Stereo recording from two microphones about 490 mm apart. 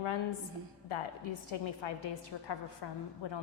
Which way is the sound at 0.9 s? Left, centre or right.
Left.